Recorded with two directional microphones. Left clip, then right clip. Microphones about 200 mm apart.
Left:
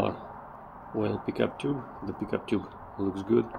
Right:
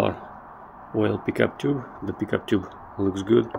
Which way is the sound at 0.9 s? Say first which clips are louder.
Right 6 dB; 25° right (ahead or behind).